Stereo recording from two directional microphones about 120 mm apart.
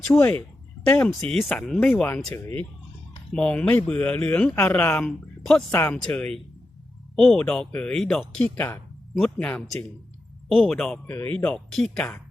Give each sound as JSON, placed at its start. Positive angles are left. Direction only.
{"t": 0.2, "sound": "speech", "side_deg": 10}
{"t": 2.3, "sound": "speech", "side_deg": 20}
{"t": 3.3, "sound": "speech", "side_deg": 5}
{"t": 8.5, "sound": "speech", "side_deg": 15}
{"t": 11.0, "sound": "speech", "side_deg": 15}